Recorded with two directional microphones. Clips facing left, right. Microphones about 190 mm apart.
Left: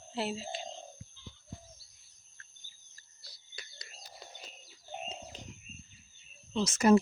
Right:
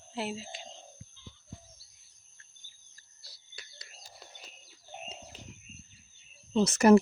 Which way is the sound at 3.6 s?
5° right (ahead or behind).